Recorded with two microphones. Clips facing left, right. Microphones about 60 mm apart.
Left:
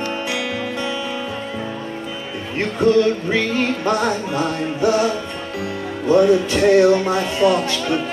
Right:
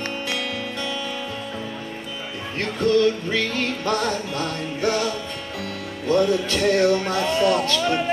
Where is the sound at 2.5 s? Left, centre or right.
Centre.